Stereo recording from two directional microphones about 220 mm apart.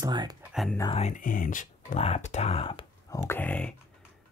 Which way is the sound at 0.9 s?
35° left (ahead or behind).